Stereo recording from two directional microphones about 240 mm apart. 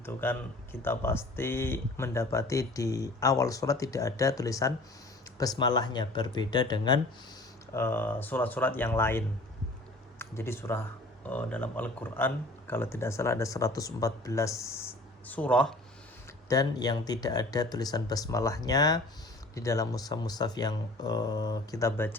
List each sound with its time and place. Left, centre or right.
0.0 s speech: centre
16.5 s speech: centre